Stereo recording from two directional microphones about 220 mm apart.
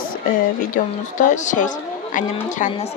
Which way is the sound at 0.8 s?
35° left (ahead or behind).